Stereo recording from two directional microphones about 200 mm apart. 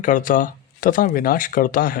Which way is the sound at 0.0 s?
40° left (ahead or behind).